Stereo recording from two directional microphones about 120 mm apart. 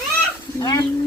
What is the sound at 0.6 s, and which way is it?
Stir, 35° left (ahead or behind).